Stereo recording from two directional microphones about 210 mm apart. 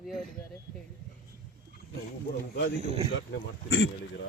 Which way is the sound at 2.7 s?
30° right (ahead or behind).